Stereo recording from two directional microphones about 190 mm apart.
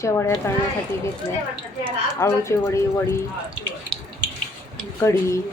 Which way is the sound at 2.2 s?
15° left (ahead or behind).